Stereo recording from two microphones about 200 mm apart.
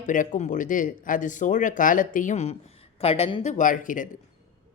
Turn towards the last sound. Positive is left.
turn(degrees=40)  # may be behind; listen again after turning